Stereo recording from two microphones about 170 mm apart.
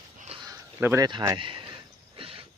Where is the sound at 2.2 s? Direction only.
30° right (ahead or behind).